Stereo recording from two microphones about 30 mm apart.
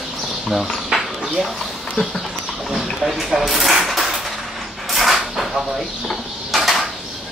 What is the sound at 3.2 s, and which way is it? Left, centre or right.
Speech, centre.